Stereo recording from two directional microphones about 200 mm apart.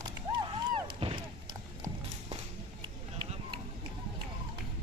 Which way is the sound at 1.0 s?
25° right (ahead or behind).